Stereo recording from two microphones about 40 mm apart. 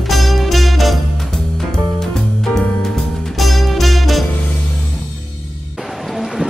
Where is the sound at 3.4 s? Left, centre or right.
Centre.